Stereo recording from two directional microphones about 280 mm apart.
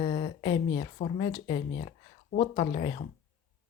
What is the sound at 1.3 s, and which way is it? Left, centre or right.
Speech, centre.